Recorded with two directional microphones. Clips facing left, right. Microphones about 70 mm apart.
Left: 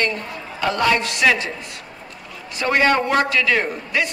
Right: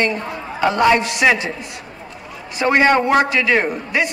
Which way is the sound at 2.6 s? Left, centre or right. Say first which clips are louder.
Right 3 dB; right.